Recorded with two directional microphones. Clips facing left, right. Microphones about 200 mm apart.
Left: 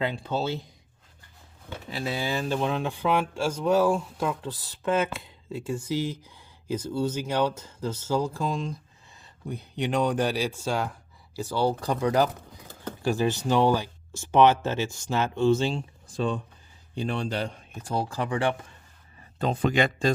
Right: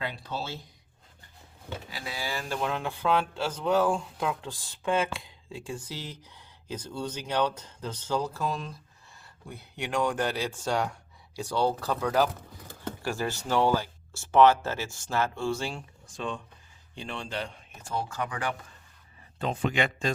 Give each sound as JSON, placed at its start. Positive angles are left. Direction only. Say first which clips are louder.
{"t": 0.0, "sound": "speech", "louder": "left 7 dB", "side_deg": 25}
{"t": 1.9, "sound": "speech", "louder": "left 8 dB", "side_deg": 25}
{"t": 16.1, "sound": "speech", "louder": "left 7 dB", "side_deg": 35}